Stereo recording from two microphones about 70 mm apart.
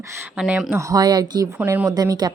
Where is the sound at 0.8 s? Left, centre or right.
Right.